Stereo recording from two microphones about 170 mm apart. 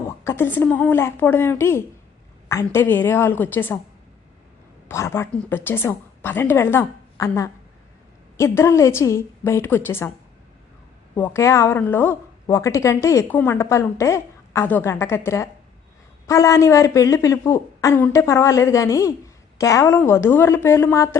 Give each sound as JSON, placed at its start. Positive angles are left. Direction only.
{"t": 0.3, "sound": "a woman's voice", "side_deg": 10}
{"t": 4.9, "sound": "a woman's voice", "side_deg": 15}
{"t": 11.1, "sound": "a woman's voice", "side_deg": 15}